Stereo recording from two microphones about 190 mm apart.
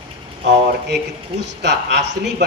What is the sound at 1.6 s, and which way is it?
Speech, 65° right (ahead or behind).